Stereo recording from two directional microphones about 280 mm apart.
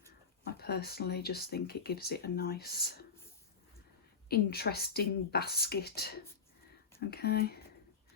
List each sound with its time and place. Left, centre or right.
0.4 s speech: left
4.3 s speech: left